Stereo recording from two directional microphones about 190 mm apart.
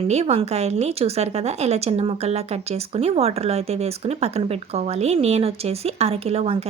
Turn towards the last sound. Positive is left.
turn(degrees=-30)  # may be behind; listen again after turning